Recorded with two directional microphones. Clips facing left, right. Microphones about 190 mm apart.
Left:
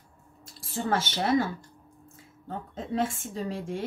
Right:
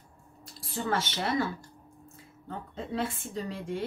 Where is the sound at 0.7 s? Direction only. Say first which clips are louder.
Left 3 dB; 45° left (ahead or behind).